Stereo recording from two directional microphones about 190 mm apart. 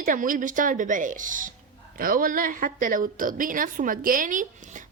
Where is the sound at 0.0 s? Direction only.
45° right (ahead or behind).